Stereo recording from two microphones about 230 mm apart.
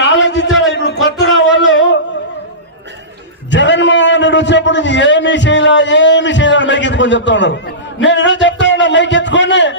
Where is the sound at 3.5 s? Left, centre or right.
Left.